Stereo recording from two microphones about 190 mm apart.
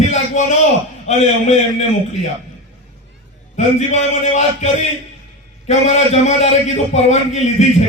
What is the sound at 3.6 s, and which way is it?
A man's voice, 35° left (ahead or behind).